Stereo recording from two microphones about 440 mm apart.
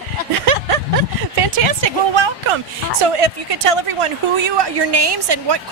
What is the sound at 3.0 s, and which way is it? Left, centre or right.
A woman's voice, right.